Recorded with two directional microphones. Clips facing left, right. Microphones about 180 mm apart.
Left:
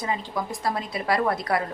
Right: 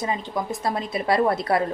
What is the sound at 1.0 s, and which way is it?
Speech, 25° right (ahead or behind).